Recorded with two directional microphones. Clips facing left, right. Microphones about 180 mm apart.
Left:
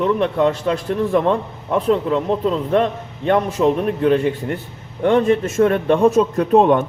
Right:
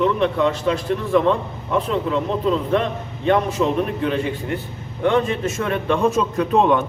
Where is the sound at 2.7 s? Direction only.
50° left (ahead or behind).